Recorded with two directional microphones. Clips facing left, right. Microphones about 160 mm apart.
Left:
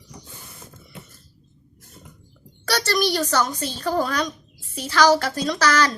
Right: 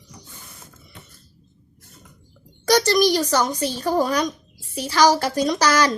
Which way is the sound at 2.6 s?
15° right (ahead or behind).